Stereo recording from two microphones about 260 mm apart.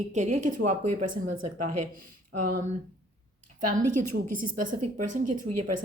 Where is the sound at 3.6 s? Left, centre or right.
Right.